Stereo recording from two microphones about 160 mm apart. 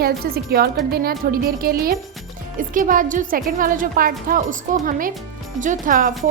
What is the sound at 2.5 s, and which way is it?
A woman's voice, 55° right (ahead or behind).